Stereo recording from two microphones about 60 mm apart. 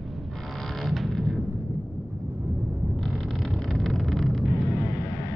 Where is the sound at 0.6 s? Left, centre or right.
Centre.